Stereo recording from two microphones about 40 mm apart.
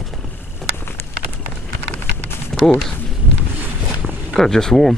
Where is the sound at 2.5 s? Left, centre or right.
Centre.